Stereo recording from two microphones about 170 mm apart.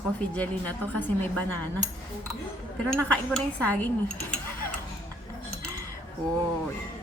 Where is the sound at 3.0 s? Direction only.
10° left (ahead or behind).